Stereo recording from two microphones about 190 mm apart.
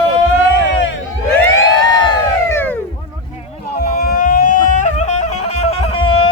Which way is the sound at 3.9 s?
50° left (ahead or behind).